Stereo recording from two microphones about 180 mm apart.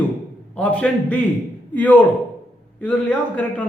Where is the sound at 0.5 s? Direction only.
5° left (ahead or behind).